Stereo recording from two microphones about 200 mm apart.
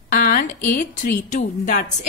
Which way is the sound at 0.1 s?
45° left (ahead or behind).